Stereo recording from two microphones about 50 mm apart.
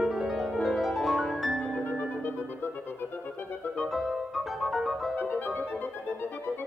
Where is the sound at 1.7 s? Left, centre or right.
Left.